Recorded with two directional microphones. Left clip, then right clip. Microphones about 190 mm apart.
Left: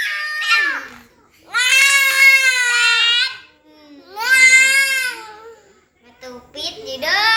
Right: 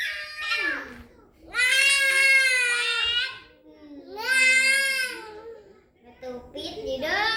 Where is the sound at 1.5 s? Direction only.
5° right (ahead or behind).